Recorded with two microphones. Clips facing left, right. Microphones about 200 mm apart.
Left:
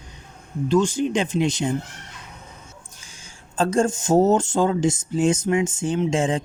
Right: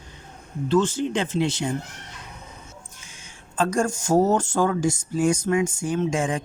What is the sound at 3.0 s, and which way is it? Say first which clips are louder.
Speech: even; 30° left (ahead or behind).